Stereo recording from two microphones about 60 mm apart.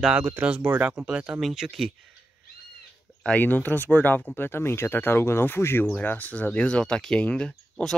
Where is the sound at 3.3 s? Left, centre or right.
Left.